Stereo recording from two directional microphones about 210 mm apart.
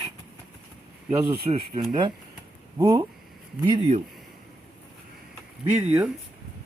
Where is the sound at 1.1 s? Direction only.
15° right (ahead or behind).